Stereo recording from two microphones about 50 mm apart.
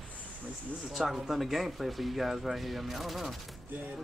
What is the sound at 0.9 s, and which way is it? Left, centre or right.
Speech, centre.